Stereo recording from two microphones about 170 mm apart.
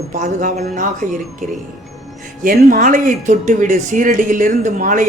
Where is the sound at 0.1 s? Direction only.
45° right (ahead or behind).